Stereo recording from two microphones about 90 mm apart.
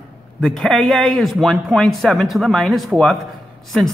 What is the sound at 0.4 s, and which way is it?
A man's voice, centre (ahead or behind).